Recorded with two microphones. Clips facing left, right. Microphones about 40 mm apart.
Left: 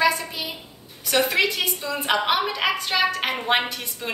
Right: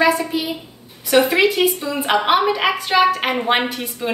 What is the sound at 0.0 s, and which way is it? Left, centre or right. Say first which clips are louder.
A woman's voice: right 5 dB; centre.